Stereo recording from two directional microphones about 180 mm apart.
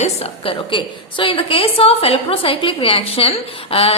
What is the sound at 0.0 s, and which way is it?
A woman's voice, 30° left (ahead or behind).